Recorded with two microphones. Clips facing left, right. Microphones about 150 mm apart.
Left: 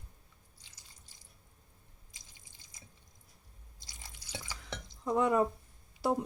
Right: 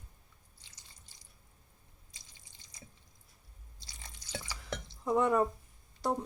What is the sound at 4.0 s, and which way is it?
Drip, 10° left (ahead or behind).